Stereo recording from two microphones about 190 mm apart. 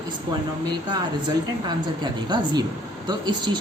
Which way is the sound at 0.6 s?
20° right (ahead or behind).